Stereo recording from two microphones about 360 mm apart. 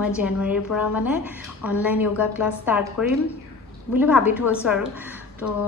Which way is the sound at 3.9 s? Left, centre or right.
Centre.